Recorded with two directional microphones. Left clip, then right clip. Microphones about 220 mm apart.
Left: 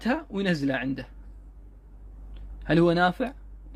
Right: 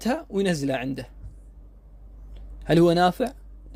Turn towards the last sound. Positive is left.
turn(degrees=-40)  # may be behind; listen again after turning